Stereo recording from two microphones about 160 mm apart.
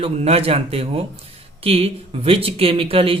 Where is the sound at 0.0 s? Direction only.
40° right (ahead or behind).